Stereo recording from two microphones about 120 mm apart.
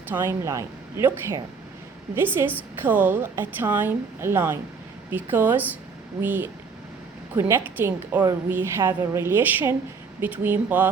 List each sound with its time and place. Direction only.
0.1 s a woman's voice: 20° right (ahead or behind)